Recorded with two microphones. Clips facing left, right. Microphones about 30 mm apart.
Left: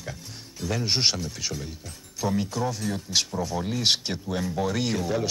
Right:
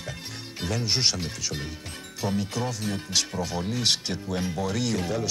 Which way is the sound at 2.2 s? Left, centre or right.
Right.